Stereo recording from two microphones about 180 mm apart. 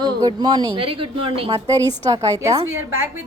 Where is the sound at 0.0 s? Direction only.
25° right (ahead or behind).